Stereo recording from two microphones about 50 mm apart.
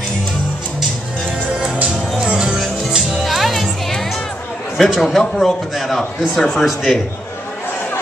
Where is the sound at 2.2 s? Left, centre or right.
Centre.